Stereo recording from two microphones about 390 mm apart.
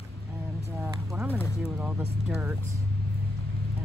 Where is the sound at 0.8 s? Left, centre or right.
Centre.